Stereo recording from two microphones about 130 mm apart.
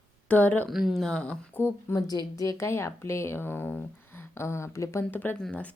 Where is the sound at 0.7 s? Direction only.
Centre (ahead or behind); by 2.0 s 15° left (ahead or behind).